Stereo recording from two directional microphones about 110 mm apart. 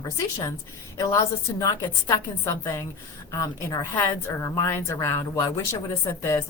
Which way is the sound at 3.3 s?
25° left (ahead or behind).